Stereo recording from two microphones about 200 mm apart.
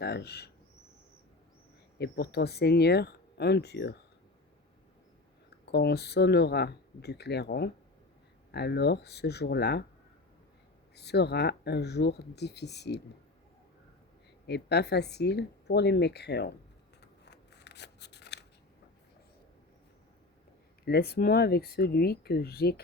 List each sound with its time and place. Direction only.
0.0 s speech: 55° left (ahead or behind)
2.0 s speech: 55° left (ahead or behind)
5.7 s speech: 55° left (ahead or behind)
10.9 s speech: 55° left (ahead or behind)
14.4 s speech: 55° left (ahead or behind)
17.0 s scissors: 55° left (ahead or behind)
20.8 s speech: 50° left (ahead or behind)